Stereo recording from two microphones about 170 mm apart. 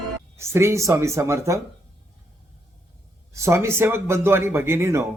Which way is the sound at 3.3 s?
15° right (ahead or behind).